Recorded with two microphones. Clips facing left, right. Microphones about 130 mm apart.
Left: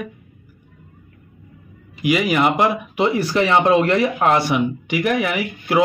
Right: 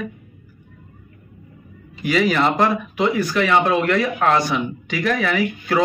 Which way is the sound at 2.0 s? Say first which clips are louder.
Left 1 dB; 10° left (ahead or behind).